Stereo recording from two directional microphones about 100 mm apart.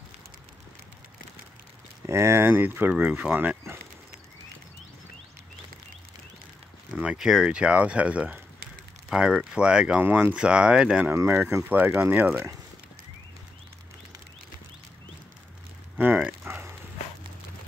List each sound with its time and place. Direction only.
2.0 s speech: 25° right (ahead or behind)
7.0 s speech: 5° right (ahead or behind)
10.0 s speech: 20° right (ahead or behind)
10.3 s speech: 10° right (ahead or behind)
11.1 s speech: 25° right (ahead or behind)
16.0 s a sound: 15° right (ahead or behind)